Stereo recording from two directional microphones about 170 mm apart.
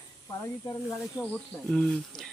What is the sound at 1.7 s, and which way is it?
Speech, 5° left (ahead or behind).